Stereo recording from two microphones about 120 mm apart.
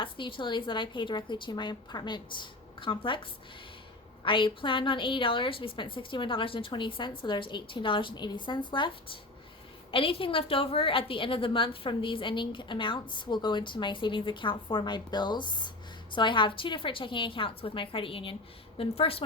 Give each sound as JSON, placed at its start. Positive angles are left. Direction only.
{"t": 0.0, "sound": "a woman's voice", "side_deg": 45}